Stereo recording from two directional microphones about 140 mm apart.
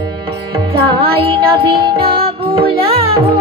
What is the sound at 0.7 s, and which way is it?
Music, 40° right (ahead or behind).